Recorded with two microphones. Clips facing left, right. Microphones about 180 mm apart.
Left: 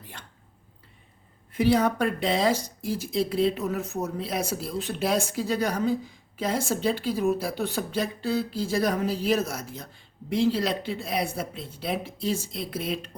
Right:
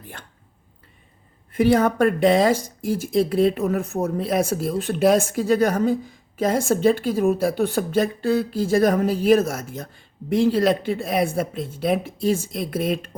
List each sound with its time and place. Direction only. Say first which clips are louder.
1.5 s speech: right 5 dB; 50° right (ahead or behind)